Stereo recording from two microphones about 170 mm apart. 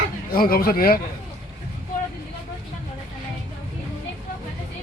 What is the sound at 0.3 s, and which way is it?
Speech, 60° left (ahead or behind).